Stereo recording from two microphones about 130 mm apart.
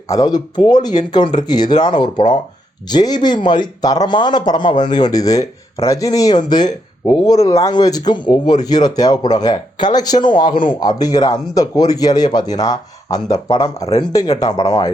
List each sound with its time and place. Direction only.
0.1 s speech: 30° left (ahead or behind)